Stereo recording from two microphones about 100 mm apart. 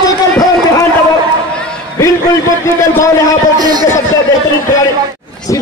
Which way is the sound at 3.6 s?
45° right (ahead or behind).